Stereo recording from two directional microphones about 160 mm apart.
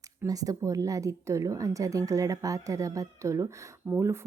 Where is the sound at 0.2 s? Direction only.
20° right (ahead or behind).